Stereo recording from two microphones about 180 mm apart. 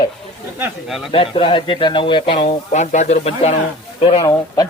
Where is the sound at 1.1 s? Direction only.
30° left (ahead or behind).